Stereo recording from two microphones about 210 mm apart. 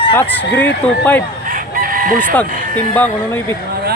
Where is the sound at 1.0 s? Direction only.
10° left (ahead or behind).